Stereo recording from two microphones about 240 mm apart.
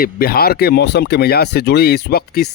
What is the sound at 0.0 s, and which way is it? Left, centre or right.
Speech, left.